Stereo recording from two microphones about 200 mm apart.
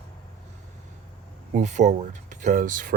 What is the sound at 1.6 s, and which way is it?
Speech, 35° right (ahead or behind).